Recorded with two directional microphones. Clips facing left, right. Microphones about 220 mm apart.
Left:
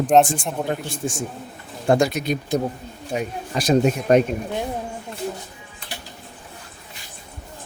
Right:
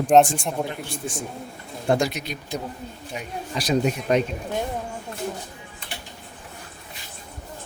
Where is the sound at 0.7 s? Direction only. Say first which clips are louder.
Left 6 dB; 50° left (ahead or behind).